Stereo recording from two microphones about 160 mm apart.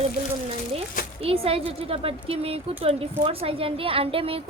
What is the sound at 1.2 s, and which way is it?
A woman's voice, 35° right (ahead or behind).